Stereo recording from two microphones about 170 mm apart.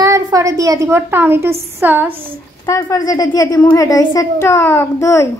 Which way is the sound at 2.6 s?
20° left (ahead or behind).